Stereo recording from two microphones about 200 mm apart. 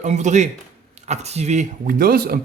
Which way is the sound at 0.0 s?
35° right (ahead or behind).